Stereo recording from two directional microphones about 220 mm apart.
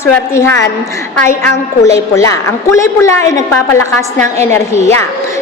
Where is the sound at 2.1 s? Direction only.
15° left (ahead or behind).